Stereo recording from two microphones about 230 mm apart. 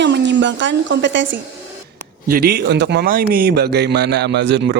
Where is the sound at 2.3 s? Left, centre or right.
Right.